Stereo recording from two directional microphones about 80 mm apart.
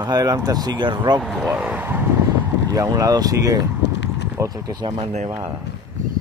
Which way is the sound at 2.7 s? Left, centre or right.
Right.